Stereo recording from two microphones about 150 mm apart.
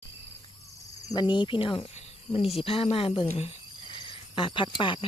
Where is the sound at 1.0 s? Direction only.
30° left (ahead or behind).